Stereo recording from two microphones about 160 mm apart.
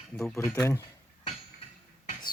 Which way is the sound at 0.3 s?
15° left (ahead or behind).